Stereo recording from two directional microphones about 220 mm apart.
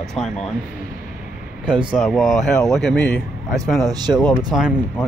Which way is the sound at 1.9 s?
Centre (ahead or behind).